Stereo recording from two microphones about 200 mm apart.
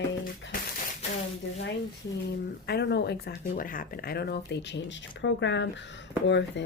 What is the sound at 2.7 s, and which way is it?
Speech, 55° left (ahead or behind).